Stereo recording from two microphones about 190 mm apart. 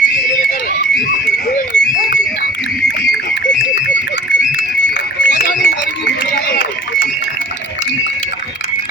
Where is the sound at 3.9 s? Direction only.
70° left (ahead or behind).